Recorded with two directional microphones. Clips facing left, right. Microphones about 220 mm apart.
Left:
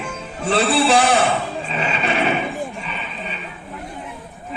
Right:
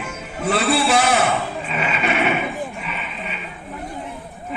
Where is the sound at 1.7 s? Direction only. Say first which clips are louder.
Even; 30° left (ahead or behind).